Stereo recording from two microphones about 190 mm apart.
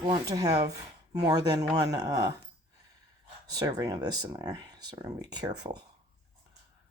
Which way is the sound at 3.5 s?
20° right (ahead or behind).